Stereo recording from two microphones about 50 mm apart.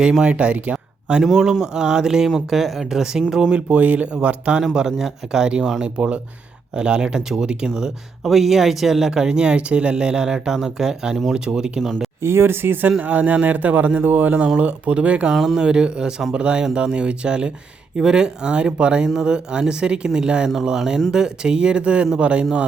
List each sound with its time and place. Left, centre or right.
0.0 s speech: centre
1.2 s speech: centre
3.5 s speech: right
4.7 s speech: centre
7.8 s speech: centre
12.2 s speech: right
13.0 s speech: right
14.4 s speech: right
15.3 s speech: centre; by 22.4 s right